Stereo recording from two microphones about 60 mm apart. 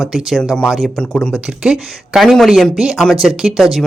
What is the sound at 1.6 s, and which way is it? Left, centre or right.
A man's voice, centre.